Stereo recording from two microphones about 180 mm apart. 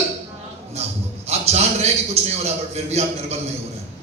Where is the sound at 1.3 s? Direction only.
35° right (ahead or behind).